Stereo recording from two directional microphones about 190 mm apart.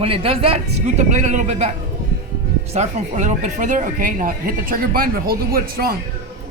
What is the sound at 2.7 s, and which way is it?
Speech, 40° right (ahead or behind).